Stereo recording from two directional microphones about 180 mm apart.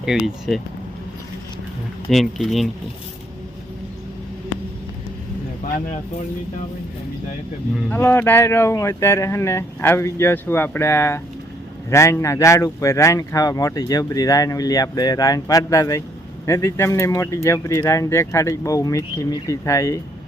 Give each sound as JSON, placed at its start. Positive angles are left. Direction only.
{"t": 0.0, "sound": "speech", "side_deg": 0}
{"t": 2.0, "sound": "speech", "side_deg": 0}
{"t": 7.9, "sound": "speech", "side_deg": 10}